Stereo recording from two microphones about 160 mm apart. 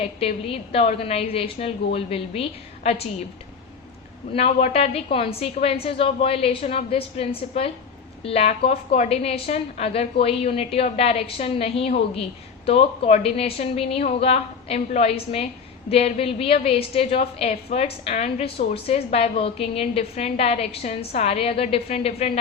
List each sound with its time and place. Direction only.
0.0 s a woman's voice: 40° left (ahead or behind)
4.4 s a woman's voice: 40° left (ahead or behind)